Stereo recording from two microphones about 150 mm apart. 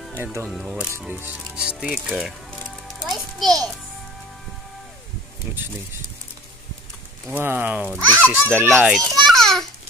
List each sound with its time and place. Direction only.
0.2 s speech: 15° right (ahead or behind)
0.5 s a child's voice: 5° right (ahead or behind)
7.2 s speech: 15° right (ahead or behind)
7.8 s a child's voice: 10° left (ahead or behind)
8.3 s speech: 15° right (ahead or behind)
8.8 s speech: centre (ahead or behind)